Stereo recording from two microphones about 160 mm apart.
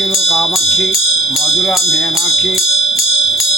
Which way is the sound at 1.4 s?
Centre (ahead or behind).